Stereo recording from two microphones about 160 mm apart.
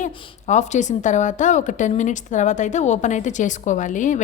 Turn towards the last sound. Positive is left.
turn(degrees=50)  # may be behind; listen again after turning